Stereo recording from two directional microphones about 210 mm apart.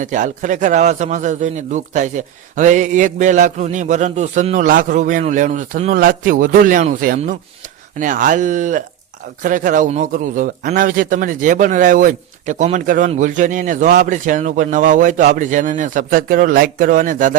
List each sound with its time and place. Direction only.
0.0 s a man's voice: 35° right (ahead or behind)